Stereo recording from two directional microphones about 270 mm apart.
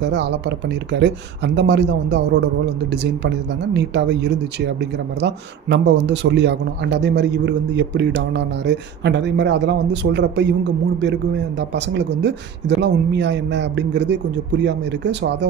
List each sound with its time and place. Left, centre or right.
0.1 s speech: right
11.7 s speech: right